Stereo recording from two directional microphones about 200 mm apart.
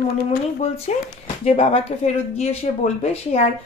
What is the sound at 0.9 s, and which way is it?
A woman's voice, 35° left (ahead or behind).